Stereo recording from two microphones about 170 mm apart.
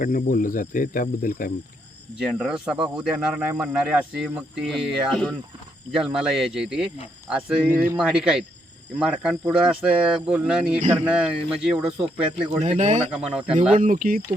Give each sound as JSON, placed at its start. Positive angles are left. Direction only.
{"t": 0.0, "sound": "speech", "side_deg": 55}
{"t": 2.1, "sound": "speech", "side_deg": -5}
{"t": 12.6, "sound": "speech", "side_deg": -40}
{"t": 13.7, "sound": "speech", "side_deg": -55}